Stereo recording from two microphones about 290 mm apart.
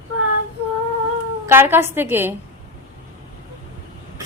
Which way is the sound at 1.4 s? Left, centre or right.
Centre.